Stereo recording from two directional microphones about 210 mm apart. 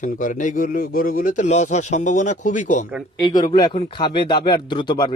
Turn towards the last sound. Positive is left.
turn(degrees=20)  # may be behind; listen again after turning